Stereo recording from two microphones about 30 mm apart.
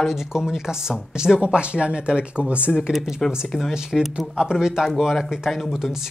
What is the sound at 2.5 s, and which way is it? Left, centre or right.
Speech, right.